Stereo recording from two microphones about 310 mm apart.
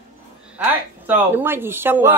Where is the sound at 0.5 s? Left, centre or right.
Centre.